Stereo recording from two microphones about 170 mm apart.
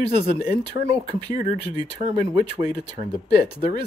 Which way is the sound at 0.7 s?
40° right (ahead or behind).